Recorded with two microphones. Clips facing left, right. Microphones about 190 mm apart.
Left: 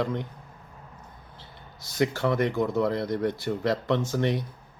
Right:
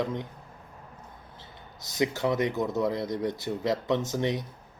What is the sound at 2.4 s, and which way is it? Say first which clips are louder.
Speech: left 2 dB; 20° right (ahead or behind).